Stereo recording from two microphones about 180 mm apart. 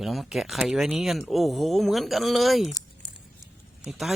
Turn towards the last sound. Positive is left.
turn(degrees=0)  # may be behind; listen again after turning